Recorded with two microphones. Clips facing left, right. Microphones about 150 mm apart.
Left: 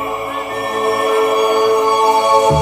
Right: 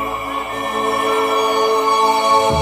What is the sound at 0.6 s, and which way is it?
Music, 5° left (ahead or behind).